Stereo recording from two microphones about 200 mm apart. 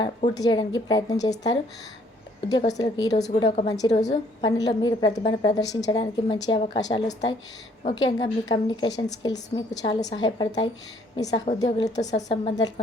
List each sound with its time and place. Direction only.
0.0 s a woman's voice: 20° left (ahead or behind)